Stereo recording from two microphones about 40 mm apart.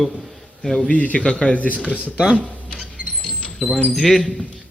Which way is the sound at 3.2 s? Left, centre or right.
Left.